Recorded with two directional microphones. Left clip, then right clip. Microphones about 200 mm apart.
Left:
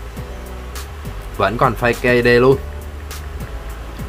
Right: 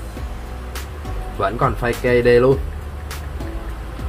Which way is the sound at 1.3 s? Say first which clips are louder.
Left 4 dB; 20° left (ahead or behind).